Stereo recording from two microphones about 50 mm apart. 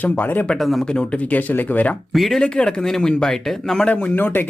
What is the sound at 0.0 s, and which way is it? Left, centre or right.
Speech, left.